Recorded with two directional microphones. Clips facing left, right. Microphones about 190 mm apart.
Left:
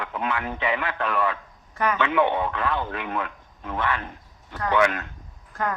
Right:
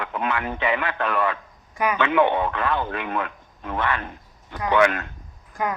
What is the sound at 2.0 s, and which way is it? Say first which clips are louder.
Speech: right 3 dB; 60° right (ahead or behind).